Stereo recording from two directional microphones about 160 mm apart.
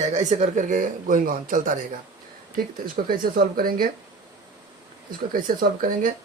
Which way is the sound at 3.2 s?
65° right (ahead or behind).